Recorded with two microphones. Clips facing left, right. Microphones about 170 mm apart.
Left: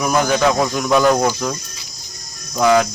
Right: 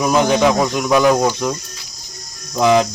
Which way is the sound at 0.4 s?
5° right (ahead or behind).